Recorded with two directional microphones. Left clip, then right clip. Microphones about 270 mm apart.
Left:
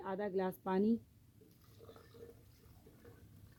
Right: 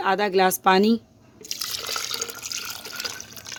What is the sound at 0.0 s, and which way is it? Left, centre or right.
Speech, right.